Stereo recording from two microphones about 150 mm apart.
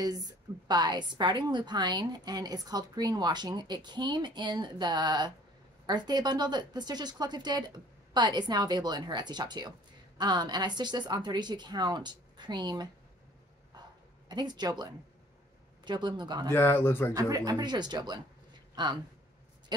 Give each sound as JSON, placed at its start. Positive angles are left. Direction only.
{"t": 0.0, "sound": "speech", "side_deg": -25}
{"t": 14.3, "sound": "speech", "side_deg": -30}
{"t": 16.5, "sound": "speech", "side_deg": 15}
{"t": 17.1, "sound": "speech", "side_deg": -25}